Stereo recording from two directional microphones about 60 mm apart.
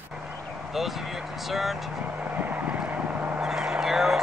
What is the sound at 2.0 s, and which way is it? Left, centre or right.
Vehicle, right.